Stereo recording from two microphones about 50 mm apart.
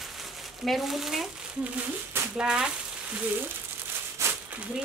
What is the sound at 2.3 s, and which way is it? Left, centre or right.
Speech, centre.